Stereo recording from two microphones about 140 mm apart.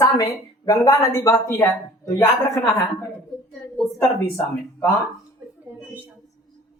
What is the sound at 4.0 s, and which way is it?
Speech, 20° left (ahead or behind).